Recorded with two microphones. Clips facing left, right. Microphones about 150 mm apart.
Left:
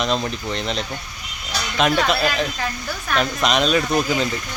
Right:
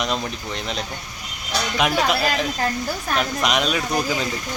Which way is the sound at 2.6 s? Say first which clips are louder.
Right 4 dB; 40° right (ahead or behind).